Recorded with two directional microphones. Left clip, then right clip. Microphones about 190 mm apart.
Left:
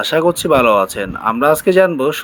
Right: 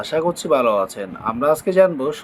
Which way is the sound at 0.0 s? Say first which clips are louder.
Left 6 dB; 15° left (ahead or behind).